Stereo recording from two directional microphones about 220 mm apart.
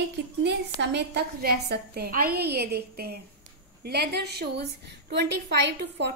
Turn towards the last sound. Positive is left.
turn(degrees=-50)  # may be behind; listen again after turning